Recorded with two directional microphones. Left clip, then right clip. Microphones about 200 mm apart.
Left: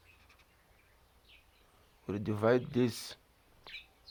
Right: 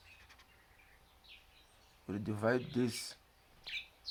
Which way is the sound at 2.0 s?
40° left (ahead or behind).